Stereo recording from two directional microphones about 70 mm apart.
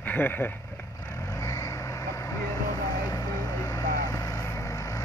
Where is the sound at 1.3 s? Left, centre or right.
Left.